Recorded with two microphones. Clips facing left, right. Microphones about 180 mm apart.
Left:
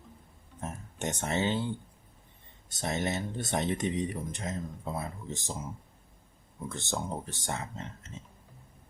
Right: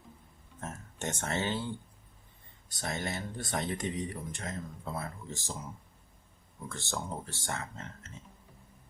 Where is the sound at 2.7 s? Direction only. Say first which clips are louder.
Left 4 dB; 20° left (ahead or behind).